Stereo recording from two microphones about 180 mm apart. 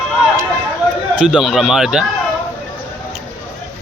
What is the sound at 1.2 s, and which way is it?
Speech, 5° right (ahead or behind).